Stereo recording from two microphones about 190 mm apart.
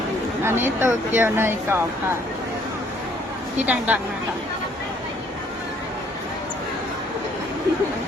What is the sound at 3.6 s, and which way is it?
Speech, 10° right (ahead or behind).